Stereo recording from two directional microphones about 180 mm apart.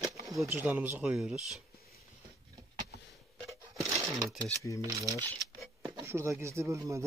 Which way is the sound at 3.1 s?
Centre (ahead or behind).